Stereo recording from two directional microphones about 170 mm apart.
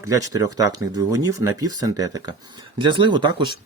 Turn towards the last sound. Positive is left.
turn(degrees=-25)  # may be behind; listen again after turning